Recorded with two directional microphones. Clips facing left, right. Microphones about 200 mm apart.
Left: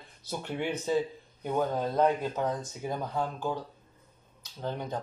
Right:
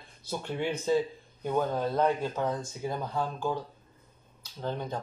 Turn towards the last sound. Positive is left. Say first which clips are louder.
# even
turn(degrees=15)  # may be behind; listen again after turning